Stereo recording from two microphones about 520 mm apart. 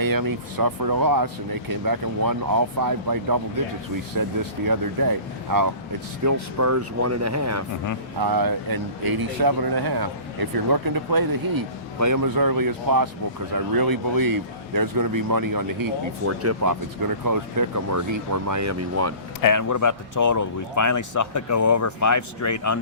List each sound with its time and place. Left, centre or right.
0.0 s speech: right
8.2 s speech: right
16.2 s speech: right
19.4 s speech: left